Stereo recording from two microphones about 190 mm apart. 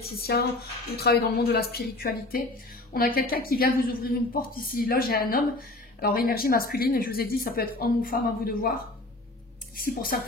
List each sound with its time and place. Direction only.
0.2 s speech: 55° left (ahead or behind)
9.8 s speech: 50° left (ahead or behind)